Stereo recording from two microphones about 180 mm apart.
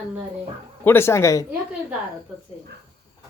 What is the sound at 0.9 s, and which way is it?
Speech, 15° left (ahead or behind).